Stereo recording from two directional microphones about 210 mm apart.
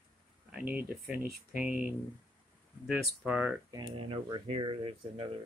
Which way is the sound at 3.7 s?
20° right (ahead or behind).